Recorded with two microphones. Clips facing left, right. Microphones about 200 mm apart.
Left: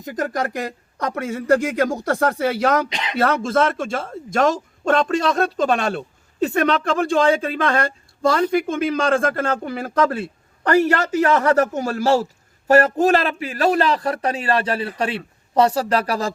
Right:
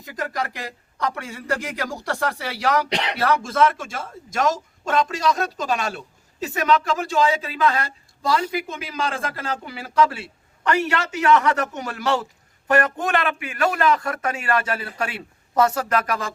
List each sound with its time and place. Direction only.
0.0 s speech: 50° left (ahead or behind)
2.9 s speech: 65° right (ahead or behind)
3.2 s speech: 55° left (ahead or behind); by 16.3 s 35° left (ahead or behind)